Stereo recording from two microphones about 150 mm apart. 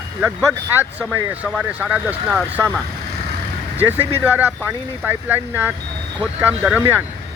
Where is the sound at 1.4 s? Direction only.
5° right (ahead or behind).